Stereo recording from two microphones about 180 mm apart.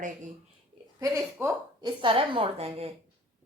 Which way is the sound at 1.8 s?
25° right (ahead or behind).